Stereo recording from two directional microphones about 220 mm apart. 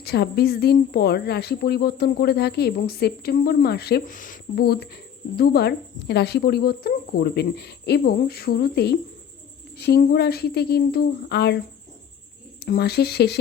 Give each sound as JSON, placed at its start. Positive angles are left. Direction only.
{"t": 0.0, "sound": "a woman's voice", "side_deg": 45}
{"t": 12.6, "sound": "a woman's voice", "side_deg": 45}